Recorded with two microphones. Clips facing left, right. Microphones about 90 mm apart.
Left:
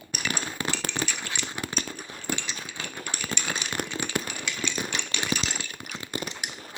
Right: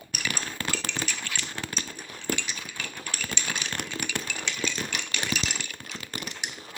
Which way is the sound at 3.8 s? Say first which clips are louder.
Left 4 dB; 40° left (ahead or behind).